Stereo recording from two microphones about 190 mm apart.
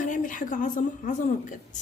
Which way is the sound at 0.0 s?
45° left (ahead or behind).